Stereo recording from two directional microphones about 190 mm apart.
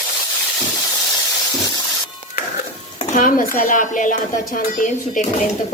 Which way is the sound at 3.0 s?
45° left (ahead or behind).